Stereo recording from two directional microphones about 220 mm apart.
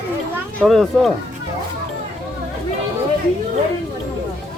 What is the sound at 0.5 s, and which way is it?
Speech, centre (ahead or behind).